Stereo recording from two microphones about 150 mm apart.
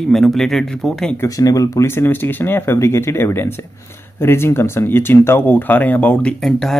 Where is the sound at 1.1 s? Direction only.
20° left (ahead or behind).